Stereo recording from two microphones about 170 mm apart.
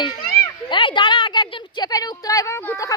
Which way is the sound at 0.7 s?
30° left (ahead or behind).